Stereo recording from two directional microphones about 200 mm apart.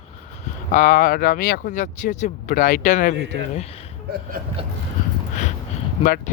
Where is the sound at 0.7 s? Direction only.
40° left (ahead or behind).